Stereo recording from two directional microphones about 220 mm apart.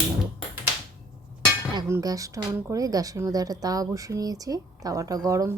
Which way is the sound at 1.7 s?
15° right (ahead or behind).